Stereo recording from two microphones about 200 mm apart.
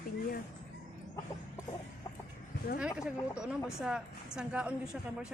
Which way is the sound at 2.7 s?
5° right (ahead or behind).